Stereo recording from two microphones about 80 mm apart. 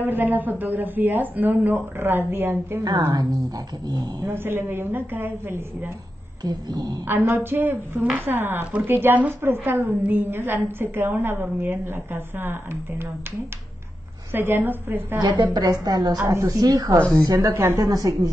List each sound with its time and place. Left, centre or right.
0.0 s speech: right
3.1 s a sound: right
4.3 s speech: right
6.4 s a sound: right
7.1 s speech: right
14.3 s speech: right
15.2 s a woman's voice: right
15.6 s speech: right